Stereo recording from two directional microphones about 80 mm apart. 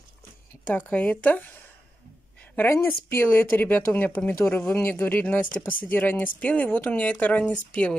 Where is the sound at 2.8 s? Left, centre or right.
Left.